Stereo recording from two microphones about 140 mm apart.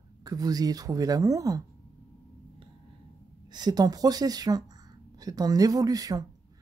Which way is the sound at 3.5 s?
30° right (ahead or behind).